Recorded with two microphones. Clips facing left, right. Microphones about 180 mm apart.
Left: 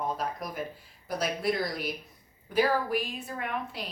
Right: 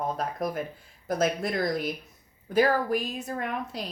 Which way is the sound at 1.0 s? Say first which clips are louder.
Right 3 dB; 50° right (ahead or behind).